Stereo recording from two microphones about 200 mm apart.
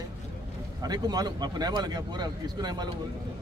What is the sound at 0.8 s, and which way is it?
Speech, 20° right (ahead or behind).